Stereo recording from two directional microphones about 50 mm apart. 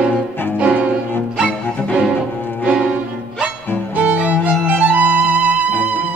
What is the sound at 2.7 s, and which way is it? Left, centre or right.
Music, centre.